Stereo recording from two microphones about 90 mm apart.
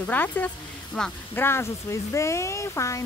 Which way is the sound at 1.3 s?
25° left (ahead or behind).